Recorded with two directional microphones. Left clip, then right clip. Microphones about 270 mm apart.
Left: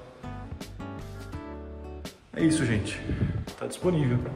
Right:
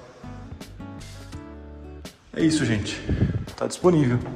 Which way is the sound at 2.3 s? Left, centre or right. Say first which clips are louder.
Right 3 dB; centre.